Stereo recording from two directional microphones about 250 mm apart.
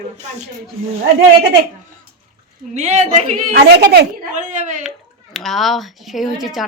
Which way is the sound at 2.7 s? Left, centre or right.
Right.